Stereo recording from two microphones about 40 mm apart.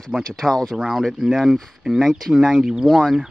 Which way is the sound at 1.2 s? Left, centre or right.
Centre.